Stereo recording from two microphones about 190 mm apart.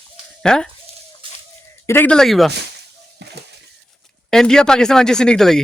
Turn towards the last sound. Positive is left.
turn(degrees=5)  # may be behind; listen again after turning